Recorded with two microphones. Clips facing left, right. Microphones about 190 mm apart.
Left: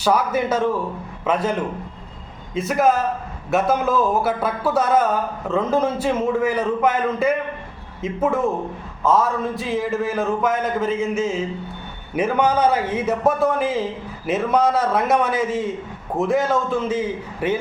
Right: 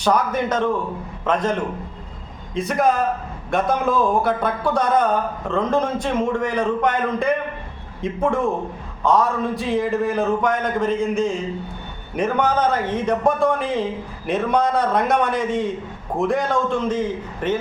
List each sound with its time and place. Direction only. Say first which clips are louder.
0.0 s a man's voice: even; 5° left (ahead or behind)
2.6 s a man's voice: left 1 dB; centre (ahead or behind)